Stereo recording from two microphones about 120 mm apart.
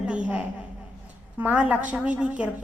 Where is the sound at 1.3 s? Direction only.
10° right (ahead or behind).